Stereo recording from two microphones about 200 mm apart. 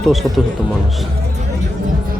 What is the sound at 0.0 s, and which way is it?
Speech, centre (ahead or behind).